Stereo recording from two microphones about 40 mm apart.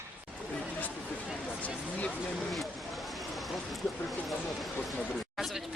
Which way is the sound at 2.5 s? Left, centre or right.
Centre.